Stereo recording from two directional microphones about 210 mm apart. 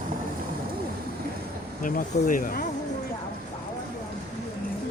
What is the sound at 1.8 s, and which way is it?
Speech, 40° left (ahead or behind).